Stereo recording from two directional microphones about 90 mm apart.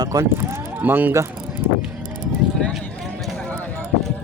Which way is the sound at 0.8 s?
20° right (ahead or behind).